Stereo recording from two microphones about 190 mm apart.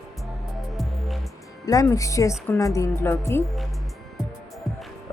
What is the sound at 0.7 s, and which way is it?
Music, centre (ahead or behind).